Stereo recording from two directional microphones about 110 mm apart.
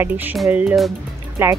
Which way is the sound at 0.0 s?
15° right (ahead or behind).